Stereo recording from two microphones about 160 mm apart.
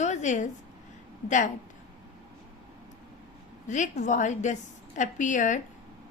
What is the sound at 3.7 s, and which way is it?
A woman's voice, 50° left (ahead or behind).